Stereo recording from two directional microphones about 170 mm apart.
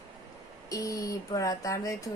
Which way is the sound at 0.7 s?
20° left (ahead or behind).